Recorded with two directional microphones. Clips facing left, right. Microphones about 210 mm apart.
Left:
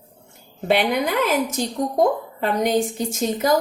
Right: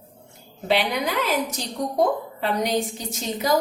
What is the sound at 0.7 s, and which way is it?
A woman's voice, 50° left (ahead or behind).